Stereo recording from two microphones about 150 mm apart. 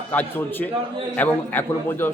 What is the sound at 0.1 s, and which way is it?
A man's voice, 10° left (ahead or behind).